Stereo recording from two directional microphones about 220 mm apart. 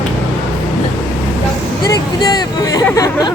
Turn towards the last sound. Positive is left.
turn(degrees=15)  # may be behind; listen again after turning